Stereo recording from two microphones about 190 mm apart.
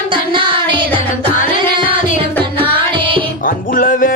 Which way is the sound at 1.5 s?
25° right (ahead or behind).